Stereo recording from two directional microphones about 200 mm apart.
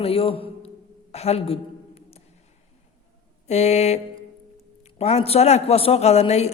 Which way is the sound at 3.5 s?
35° left (ahead or behind).